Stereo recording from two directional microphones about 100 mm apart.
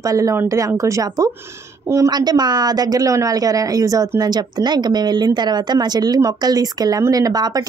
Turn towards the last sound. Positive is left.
turn(degrees=-40)  # may be behind; listen again after turning